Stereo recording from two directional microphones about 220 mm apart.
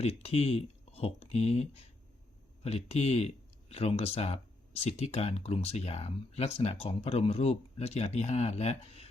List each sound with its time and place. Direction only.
0.0 s speech: 30° left (ahead or behind)